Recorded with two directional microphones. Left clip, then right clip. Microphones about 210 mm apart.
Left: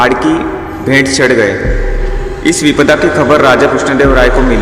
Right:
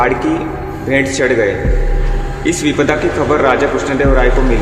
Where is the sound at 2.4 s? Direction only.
35° left (ahead or behind).